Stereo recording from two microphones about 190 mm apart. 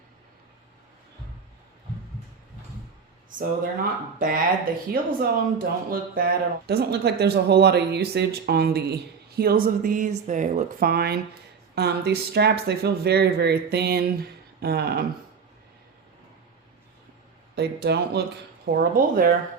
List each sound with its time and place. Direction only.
3.2 s speech: 45° right (ahead or behind)
4.9 s speech: 50° right (ahead or behind)
17.5 s speech: 60° right (ahead or behind)